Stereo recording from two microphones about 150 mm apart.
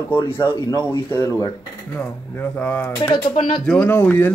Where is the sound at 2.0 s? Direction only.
10° left (ahead or behind).